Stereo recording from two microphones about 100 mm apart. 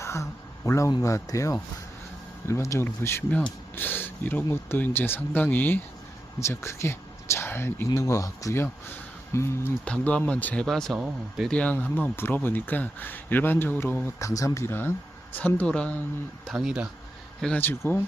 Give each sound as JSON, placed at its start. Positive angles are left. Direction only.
{"t": 0.0, "sound": "speech", "side_deg": 30}
{"t": 7.9, "sound": "speech", "side_deg": 35}
{"t": 9.8, "sound": "speech", "side_deg": 15}
{"t": 10.9, "sound": "speech", "side_deg": -5}
{"t": 11.4, "sound": "speech", "side_deg": 10}
{"t": 14.2, "sound": "speech", "side_deg": 30}
{"t": 16.5, "sound": "speech", "side_deg": -5}
{"t": 17.6, "sound": "speech", "side_deg": 20}